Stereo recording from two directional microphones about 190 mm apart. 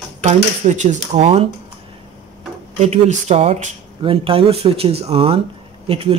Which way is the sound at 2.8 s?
35° right (ahead or behind).